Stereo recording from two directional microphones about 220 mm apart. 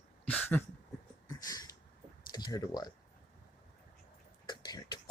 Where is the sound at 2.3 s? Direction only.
20° left (ahead or behind).